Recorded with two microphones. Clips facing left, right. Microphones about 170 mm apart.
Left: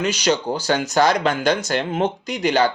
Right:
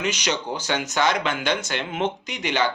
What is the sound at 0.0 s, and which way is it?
Speech, 35° left (ahead or behind).